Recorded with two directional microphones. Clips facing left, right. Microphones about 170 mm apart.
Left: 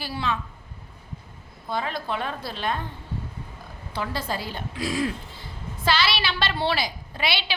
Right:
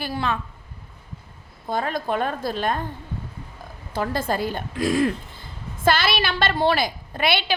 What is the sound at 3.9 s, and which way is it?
A woman's voice, 45° right (ahead or behind).